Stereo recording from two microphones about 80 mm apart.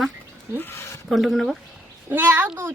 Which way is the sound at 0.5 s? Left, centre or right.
Left.